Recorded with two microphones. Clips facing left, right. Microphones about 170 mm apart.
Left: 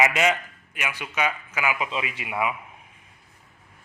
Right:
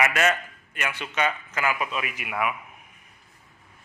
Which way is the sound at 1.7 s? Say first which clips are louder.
Left 1 dB; 25° left (ahead or behind).